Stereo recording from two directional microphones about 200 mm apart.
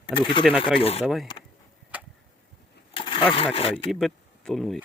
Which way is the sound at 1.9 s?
5° right (ahead or behind).